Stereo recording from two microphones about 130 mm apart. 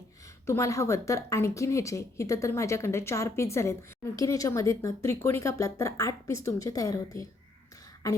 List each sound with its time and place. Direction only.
0.4 s a woman's voice: 20° left (ahead or behind)